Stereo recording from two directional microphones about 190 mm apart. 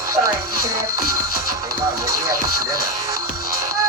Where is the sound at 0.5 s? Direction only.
15° right (ahead or behind).